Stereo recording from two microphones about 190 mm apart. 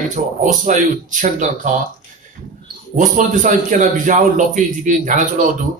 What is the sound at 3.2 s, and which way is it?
Speech, 40° right (ahead or behind).